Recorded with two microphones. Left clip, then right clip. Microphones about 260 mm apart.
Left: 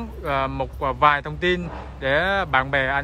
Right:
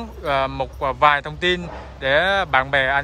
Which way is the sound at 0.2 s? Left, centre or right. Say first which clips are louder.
Right 3 dB; centre.